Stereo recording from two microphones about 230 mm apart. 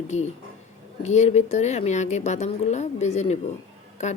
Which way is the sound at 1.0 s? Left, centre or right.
Left.